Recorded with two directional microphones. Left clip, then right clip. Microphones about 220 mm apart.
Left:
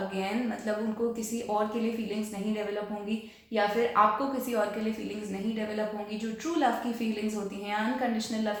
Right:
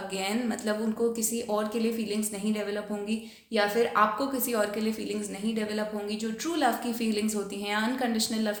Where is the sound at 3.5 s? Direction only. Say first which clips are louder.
Even; 40° right (ahead or behind).